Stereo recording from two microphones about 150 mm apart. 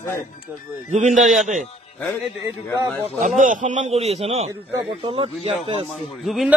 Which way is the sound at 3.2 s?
55° right (ahead or behind).